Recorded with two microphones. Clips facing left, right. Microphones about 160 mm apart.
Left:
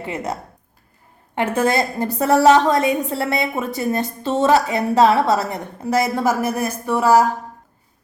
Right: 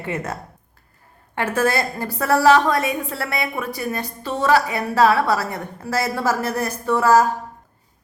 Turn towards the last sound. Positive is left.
turn(degrees=10)  # may be behind; listen again after turning